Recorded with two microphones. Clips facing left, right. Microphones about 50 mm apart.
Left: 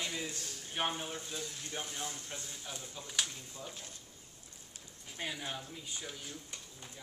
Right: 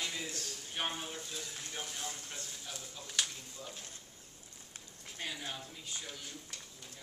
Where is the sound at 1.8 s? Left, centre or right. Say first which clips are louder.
Left 2 dB; left.